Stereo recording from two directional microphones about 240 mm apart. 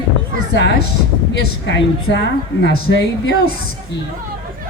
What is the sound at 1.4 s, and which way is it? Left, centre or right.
Speech, left.